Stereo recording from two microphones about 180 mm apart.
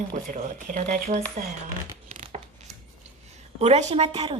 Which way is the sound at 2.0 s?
40° right (ahead or behind).